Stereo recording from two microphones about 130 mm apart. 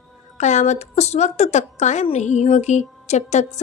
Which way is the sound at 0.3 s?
65° left (ahead or behind).